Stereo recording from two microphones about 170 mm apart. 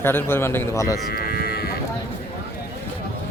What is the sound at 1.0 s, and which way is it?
Cattle, 60° left (ahead or behind).